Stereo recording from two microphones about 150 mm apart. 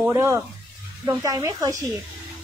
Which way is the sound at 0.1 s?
20° right (ahead or behind).